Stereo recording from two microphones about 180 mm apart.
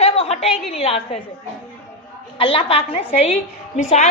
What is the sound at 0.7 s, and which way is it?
Speech, 35° left (ahead or behind).